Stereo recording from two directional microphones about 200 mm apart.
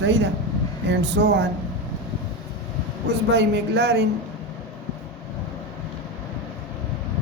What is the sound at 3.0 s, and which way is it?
Speech, 60° right (ahead or behind).